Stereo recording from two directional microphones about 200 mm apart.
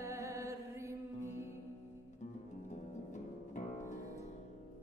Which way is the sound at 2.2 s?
35° left (ahead or behind).